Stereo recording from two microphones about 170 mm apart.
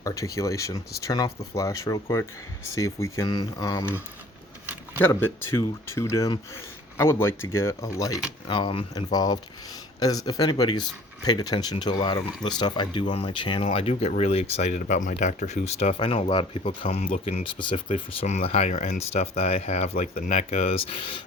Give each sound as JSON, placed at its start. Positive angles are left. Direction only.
{"t": 0.0, "sound": "speech", "side_deg": 20}
{"t": 16.8, "sound": "speech", "side_deg": 45}